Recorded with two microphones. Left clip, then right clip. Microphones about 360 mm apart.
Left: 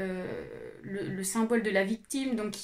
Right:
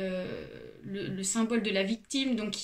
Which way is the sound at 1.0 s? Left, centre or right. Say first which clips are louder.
Left 1 dB; left.